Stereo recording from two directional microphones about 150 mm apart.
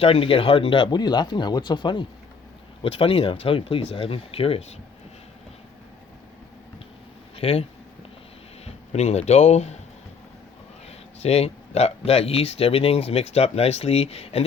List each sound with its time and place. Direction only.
0.0 s speech: 40° left (ahead or behind)
7.3 s speech: 40° left (ahead or behind)
8.6 s speech: 45° left (ahead or behind)
10.8 s speech: 45° left (ahead or behind)